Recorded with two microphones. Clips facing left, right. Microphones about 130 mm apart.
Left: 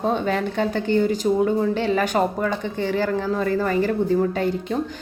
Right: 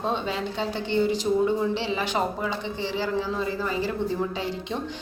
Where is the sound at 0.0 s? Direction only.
55° left (ahead or behind).